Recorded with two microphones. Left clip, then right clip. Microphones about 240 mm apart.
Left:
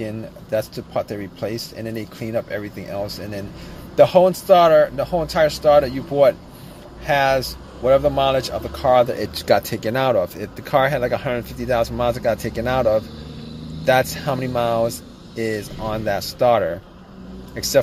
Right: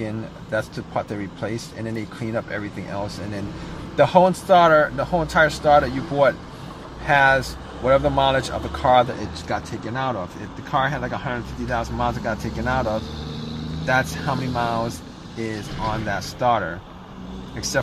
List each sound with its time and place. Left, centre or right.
0.0 s speech: centre
3.9 s speech: centre
9.3 s speech: left